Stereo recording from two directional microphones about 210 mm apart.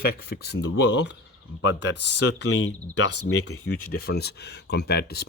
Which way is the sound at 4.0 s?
50° left (ahead or behind).